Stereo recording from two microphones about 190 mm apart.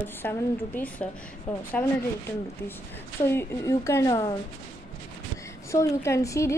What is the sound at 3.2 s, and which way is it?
Speech, 15° left (ahead or behind).